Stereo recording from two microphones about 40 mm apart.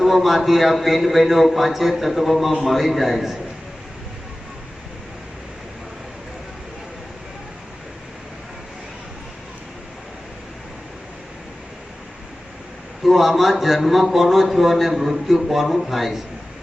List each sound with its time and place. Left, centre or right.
0.0 s a man's voice: centre
13.1 s a man's voice: centre